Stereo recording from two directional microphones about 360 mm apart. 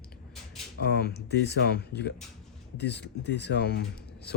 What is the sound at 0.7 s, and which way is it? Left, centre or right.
Speech, left.